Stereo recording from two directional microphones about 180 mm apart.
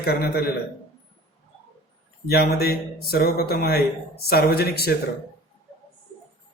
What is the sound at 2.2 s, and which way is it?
Speech, 60° left (ahead or behind).